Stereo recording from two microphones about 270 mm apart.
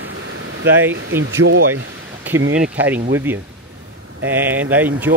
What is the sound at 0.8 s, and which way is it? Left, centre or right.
Speech, centre.